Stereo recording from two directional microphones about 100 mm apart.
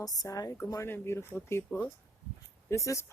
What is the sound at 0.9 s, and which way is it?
Speech, 25° left (ahead or behind).